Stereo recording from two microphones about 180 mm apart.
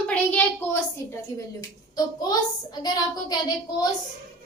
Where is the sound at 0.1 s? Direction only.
10° left (ahead or behind).